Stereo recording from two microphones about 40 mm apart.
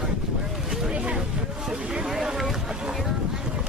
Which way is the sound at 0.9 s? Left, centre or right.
Right.